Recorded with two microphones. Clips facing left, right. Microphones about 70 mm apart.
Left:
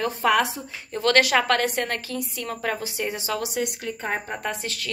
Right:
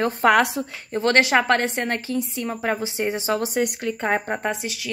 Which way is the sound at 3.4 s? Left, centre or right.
Right.